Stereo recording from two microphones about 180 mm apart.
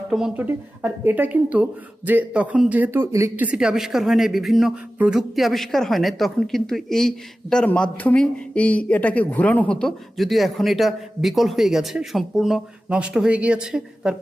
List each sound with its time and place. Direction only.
0.1 s speech: 5° right (ahead or behind)